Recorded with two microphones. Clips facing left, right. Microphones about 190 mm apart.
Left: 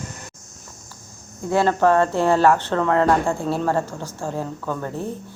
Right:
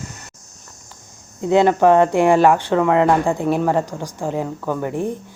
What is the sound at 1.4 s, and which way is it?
A woman's voice, 20° right (ahead or behind).